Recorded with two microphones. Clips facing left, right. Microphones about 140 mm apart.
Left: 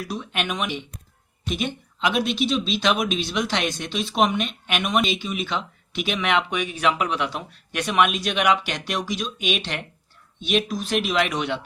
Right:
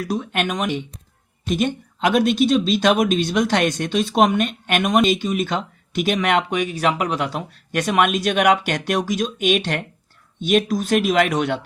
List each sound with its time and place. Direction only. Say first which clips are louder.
0.0 s speech: right 6 dB; 50° right (ahead or behind)